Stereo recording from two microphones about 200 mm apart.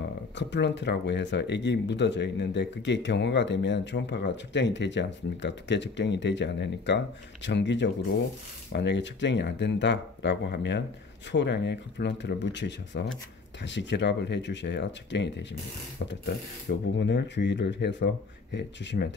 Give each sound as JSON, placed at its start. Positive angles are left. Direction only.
{"t": 0.4, "sound": "speech", "side_deg": 60}